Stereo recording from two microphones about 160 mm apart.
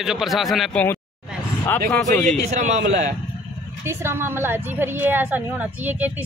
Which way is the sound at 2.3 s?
50° right (ahead or behind).